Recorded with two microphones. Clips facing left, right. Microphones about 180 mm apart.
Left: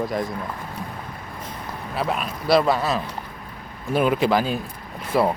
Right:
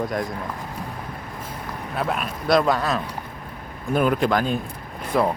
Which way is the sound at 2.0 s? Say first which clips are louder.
Even; centre (ahead or behind).